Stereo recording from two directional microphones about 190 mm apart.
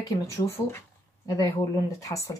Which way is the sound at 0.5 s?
15° left (ahead or behind).